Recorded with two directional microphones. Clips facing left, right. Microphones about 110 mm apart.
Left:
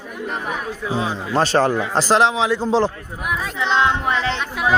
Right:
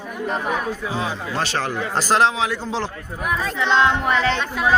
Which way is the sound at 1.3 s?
40° left (ahead or behind).